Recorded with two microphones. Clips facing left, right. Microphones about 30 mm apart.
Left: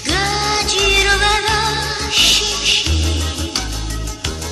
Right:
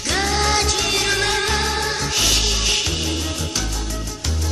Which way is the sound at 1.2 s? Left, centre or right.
Left.